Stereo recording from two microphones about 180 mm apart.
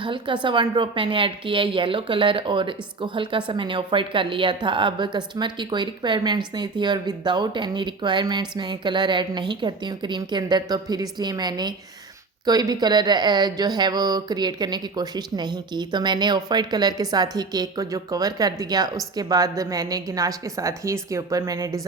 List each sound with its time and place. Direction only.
0.0 s a woman's voice: 25° right (ahead or behind)